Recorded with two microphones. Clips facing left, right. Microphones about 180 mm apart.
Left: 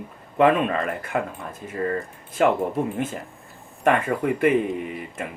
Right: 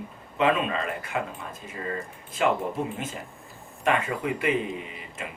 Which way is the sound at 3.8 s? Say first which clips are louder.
Left 5 dB; 50° left (ahead or behind).